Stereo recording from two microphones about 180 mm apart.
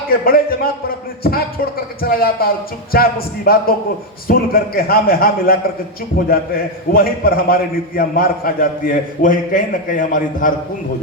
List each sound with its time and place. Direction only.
0.1 s a man's voice: 55° left (ahead or behind)